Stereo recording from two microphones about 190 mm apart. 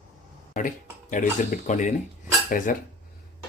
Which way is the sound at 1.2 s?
40° left (ahead or behind).